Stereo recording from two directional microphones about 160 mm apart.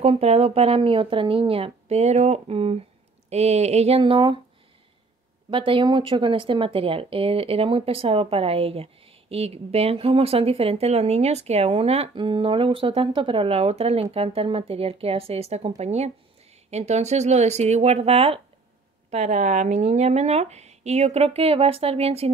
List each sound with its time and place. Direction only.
0.0 s speech: 40° right (ahead or behind)
5.5 s speech: 30° right (ahead or behind)